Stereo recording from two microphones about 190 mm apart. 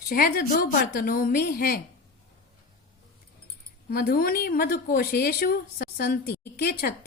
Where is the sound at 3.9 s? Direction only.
50° left (ahead or behind).